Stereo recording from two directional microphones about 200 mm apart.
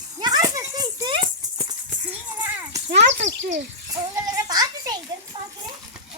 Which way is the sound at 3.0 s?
65° right (ahead or behind).